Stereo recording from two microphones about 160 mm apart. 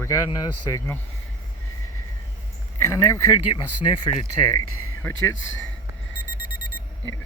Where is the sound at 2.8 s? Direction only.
20° left (ahead or behind).